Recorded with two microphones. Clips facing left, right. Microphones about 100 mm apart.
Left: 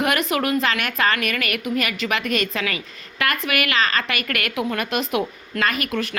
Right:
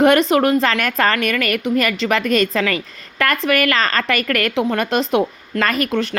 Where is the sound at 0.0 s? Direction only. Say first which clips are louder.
Right 8 dB; 30° right (ahead or behind).